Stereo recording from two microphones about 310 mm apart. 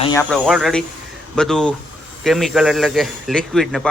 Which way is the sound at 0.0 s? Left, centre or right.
Centre.